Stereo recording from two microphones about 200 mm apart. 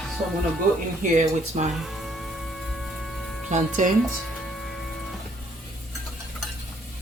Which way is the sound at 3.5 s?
40° right (ahead or behind).